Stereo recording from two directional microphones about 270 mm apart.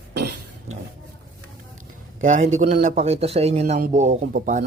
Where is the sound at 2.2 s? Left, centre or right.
Right.